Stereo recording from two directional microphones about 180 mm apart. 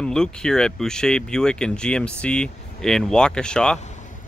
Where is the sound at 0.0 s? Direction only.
5° left (ahead or behind).